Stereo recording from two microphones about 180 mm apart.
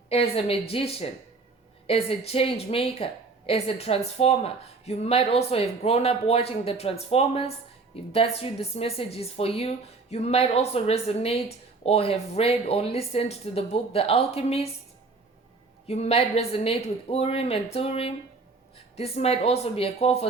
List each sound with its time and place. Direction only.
0.1 s speech: 35° left (ahead or behind)
15.9 s speech: 35° left (ahead or behind)